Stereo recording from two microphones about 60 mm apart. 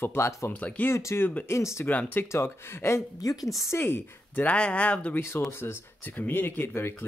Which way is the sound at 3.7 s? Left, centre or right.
Left.